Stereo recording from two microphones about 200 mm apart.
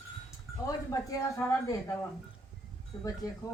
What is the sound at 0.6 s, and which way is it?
A woman's voice, 15° left (ahead or behind).